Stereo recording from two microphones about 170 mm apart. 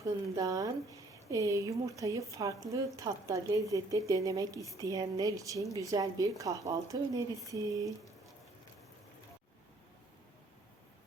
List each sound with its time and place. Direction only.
0.3 s speech: 20° right (ahead or behind)